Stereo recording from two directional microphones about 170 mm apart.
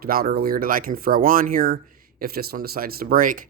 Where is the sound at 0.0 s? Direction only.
60° right (ahead or behind).